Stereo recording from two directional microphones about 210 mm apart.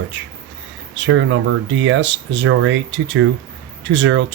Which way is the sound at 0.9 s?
60° right (ahead or behind).